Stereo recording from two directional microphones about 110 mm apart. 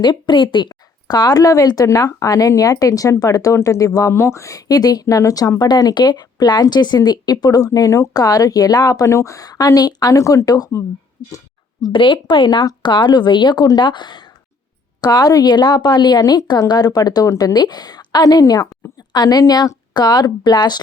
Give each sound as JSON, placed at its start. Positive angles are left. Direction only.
{"t": 0.0, "sound": "speech", "side_deg": 45}
{"t": 11.9, "sound": "a woman's voice", "side_deg": 50}